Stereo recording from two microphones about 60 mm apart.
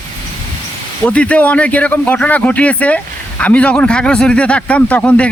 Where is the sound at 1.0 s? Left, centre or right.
Left.